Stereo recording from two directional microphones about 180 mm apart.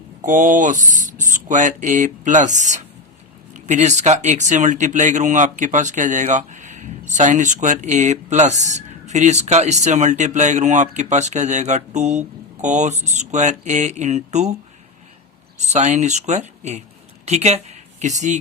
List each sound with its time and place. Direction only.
0.2 s speech: 45° right (ahead or behind)
15.5 s speech: 40° right (ahead or behind)